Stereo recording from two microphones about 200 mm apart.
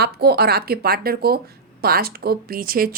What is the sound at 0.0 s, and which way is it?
A woman's voice, 50° right (ahead or behind).